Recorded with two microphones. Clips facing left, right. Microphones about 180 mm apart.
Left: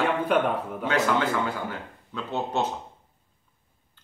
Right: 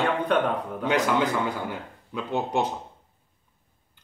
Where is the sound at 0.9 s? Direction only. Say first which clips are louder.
Right 1 dB; 15° right (ahead or behind).